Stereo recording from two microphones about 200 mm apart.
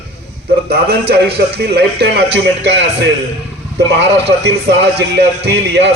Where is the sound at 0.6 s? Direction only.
55° right (ahead or behind).